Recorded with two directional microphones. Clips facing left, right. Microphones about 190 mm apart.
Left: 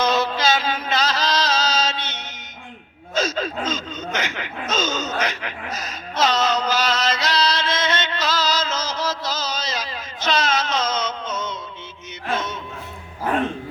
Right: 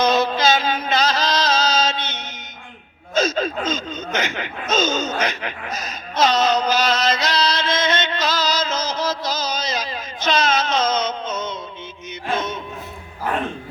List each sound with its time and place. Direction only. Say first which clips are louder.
0.0 s chant: right 3 dB; 20° right (ahead or behind)
3.2 s gasp: right 3 dB; 20° right (ahead or behind)
12.3 s music: right 2 dB; 20° right (ahead or behind)